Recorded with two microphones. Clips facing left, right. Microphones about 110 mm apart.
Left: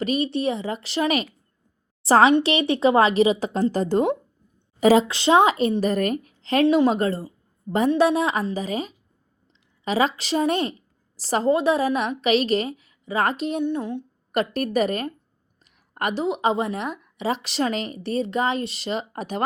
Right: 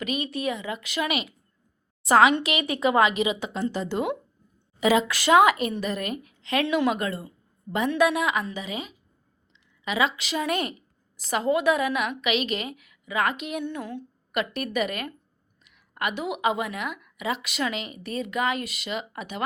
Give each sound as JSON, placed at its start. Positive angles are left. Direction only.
{"t": 0.0, "sound": "a woman's voice", "side_deg": 35}
{"t": 5.0, "sound": "a woman's voice", "side_deg": 25}
{"t": 13.7, "sound": "speech", "side_deg": 20}
{"t": 14.3, "sound": "a woman's voice", "side_deg": 40}